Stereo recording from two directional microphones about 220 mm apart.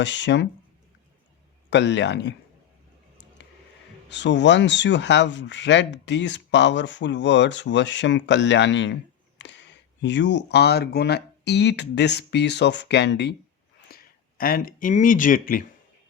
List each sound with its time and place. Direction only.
0.0 s speech: 55° left (ahead or behind)
1.7 s speech: 55° left (ahead or behind)
4.1 s speech: 55° left (ahead or behind)
9.4 s a sound: 55° left (ahead or behind)
10.0 s speech: 55° left (ahead or behind)
13.9 s a sound: 45° left (ahead or behind)
14.3 s speech: 40° left (ahead or behind)